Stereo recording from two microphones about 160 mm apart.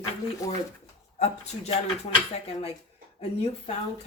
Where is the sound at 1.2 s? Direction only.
45° left (ahead or behind).